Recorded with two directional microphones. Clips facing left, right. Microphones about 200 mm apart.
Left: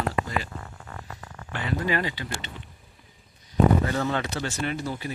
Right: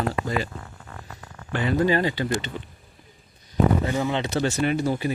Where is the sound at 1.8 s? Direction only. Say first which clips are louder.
Right 4 dB; 30° right (ahead or behind).